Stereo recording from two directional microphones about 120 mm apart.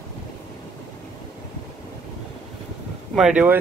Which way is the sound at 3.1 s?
5° right (ahead or behind).